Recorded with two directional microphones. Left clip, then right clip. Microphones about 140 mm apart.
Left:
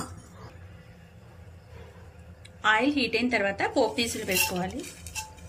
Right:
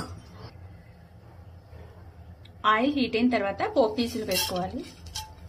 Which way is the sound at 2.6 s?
30° right (ahead or behind).